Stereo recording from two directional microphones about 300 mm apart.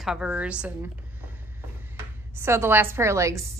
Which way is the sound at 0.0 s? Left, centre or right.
Centre.